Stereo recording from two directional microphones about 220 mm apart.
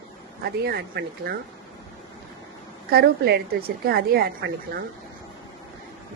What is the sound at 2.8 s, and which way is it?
A woman's voice, 45° right (ahead or behind).